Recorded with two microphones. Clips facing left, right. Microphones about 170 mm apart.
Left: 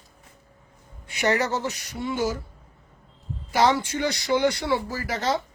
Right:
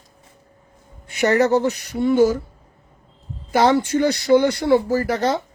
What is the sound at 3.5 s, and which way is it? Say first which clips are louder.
Speech: right 5 dB; 50° right (ahead or behind).